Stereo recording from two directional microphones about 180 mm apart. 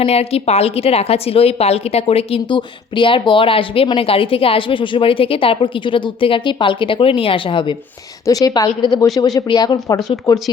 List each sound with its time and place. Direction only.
0.0 s a woman's voice: 35° left (ahead or behind)